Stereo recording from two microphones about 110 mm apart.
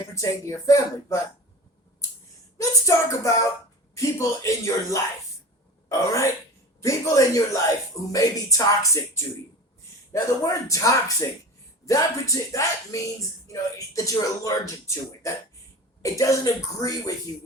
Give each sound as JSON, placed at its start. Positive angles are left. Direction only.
{"t": 0.1, "sound": "speech", "side_deg": 30}
{"t": 2.6, "sound": "music", "side_deg": 30}
{"t": 3.9, "sound": "speech", "side_deg": 30}